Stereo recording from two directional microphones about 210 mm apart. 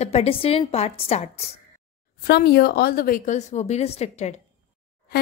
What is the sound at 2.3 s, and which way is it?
A woman's voice, 50° left (ahead or behind).